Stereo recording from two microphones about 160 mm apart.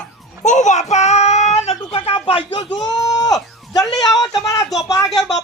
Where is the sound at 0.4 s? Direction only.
50° left (ahead or behind); by 3.9 s 25° left (ahead or behind).